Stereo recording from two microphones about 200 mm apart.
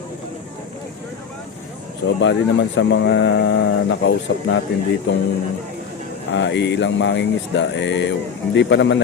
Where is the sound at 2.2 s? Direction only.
65° left (ahead or behind).